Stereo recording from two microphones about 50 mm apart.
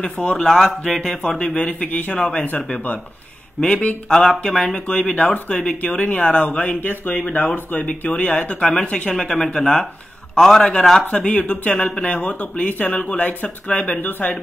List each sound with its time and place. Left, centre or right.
0.2 s speech: centre
1.4 s speech: left
2.1 s speech: centre
2.7 s speech: left
3.6 s speech: centre
6.8 s speech: left
7.2 s speech: left
9.3 s speech: centre; by 14.4 s left